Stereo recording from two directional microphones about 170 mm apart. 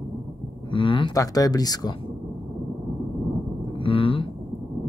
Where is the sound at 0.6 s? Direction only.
30° left (ahead or behind).